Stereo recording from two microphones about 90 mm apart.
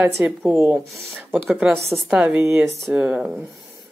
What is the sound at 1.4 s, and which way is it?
Speech, 5° right (ahead or behind).